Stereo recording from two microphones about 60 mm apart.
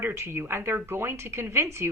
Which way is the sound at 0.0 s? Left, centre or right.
Right.